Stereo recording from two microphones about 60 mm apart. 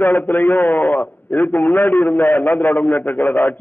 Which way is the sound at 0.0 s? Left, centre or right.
Left.